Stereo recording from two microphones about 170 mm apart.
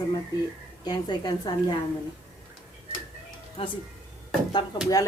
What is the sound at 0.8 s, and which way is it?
Speech, 25° left (ahead or behind).